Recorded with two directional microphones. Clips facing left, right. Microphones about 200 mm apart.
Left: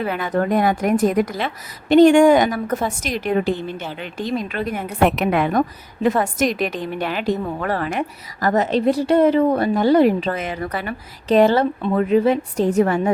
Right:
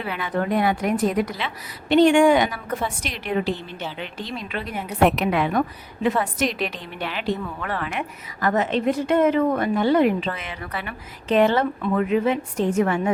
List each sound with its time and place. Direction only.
0.0 s a woman's voice: 45° left (ahead or behind)
4.9 s a woman's voice: centre (ahead or behind)
5.2 s a woman's voice: 50° left (ahead or behind)